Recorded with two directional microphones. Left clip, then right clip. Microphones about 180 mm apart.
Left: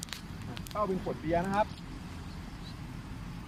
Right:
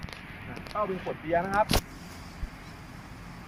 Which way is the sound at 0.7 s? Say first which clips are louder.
Right 2 dB; 20° left (ahead or behind).